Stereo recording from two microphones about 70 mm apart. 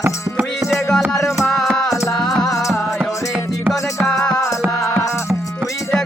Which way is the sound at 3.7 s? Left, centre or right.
Centre.